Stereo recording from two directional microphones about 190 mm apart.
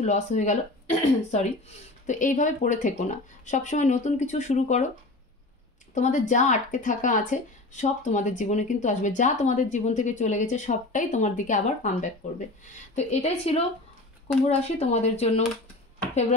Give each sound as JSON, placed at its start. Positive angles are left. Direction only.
{"t": 0.0, "sound": "speech", "side_deg": 35}
{"t": 5.9, "sound": "speech", "side_deg": 40}